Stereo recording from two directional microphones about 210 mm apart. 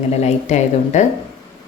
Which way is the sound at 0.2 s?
35° left (ahead or behind).